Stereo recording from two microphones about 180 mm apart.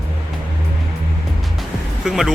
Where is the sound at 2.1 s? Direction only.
5° right (ahead or behind).